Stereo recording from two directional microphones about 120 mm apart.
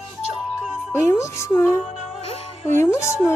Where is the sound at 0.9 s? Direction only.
20° left (ahead or behind).